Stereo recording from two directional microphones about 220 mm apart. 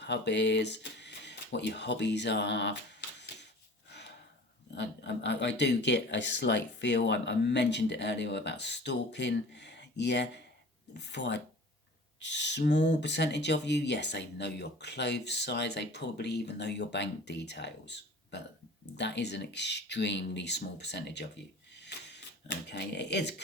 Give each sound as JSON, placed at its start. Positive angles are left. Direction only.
{"t": 0.0, "sound": "speech", "side_deg": 50}
{"t": 3.8, "sound": "gasp", "side_deg": 50}
{"t": 4.7, "sound": "speech", "side_deg": 50}
{"t": 21.8, "sound": "a sound", "side_deg": 50}